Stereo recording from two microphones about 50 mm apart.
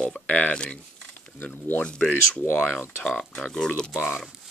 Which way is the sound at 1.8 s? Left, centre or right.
Left.